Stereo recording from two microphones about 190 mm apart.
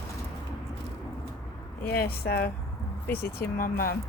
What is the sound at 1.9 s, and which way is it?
Speech, 55° left (ahead or behind).